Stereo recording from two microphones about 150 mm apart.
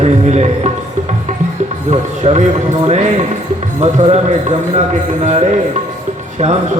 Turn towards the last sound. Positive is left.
turn(degrees=-50)  # may be behind; listen again after turning